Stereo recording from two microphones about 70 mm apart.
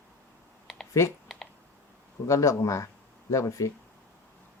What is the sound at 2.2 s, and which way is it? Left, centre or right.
Speech, left.